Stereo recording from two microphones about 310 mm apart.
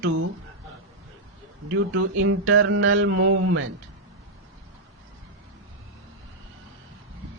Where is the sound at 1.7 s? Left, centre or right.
Right.